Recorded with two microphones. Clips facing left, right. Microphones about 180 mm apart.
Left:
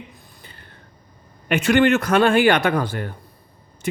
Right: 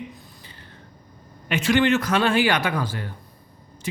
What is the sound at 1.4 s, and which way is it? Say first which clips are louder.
A man's voice: left 3 dB; 55° left (ahead or behind).